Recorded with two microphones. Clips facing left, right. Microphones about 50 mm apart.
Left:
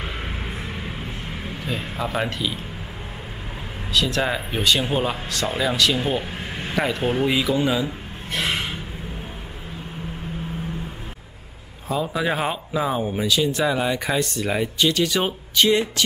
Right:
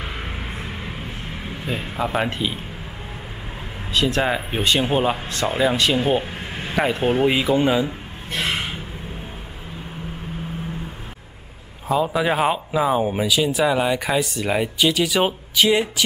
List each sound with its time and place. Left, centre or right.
0.0 s vehicle: centre
2.0 s speech: right
3.9 s speech: right
6.4 s vehicle: centre
6.7 s speech: centre
8.4 s gasp: centre
11.9 s speech: centre